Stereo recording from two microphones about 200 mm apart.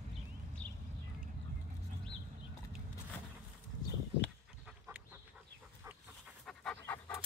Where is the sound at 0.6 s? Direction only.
5° left (ahead or behind).